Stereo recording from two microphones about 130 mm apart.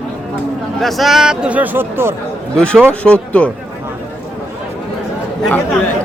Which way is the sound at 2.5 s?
5° left (ahead or behind).